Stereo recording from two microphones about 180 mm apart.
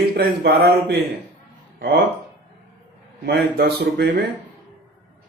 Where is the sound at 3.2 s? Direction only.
65° right (ahead or behind).